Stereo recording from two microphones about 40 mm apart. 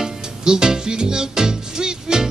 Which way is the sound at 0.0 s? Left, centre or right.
Centre.